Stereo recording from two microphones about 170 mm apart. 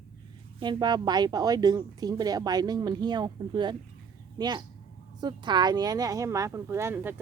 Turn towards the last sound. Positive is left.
turn(degrees=-15)  # may be behind; listen again after turning